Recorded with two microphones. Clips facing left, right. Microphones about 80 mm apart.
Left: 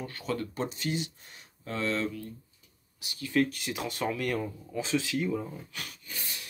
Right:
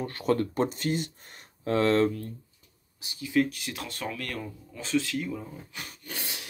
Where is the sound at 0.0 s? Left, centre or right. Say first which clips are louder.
Right 7 dB; right.